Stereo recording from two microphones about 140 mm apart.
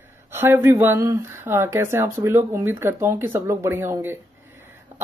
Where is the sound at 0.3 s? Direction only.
15° right (ahead or behind).